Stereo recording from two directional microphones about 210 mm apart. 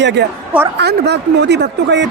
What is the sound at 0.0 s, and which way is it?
A man's voice, 55° right (ahead or behind).